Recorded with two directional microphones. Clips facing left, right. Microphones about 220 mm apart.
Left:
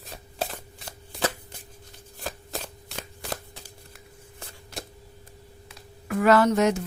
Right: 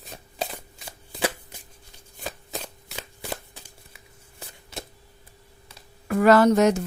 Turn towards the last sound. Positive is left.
turn(degrees=-40)  # may be behind; listen again after turning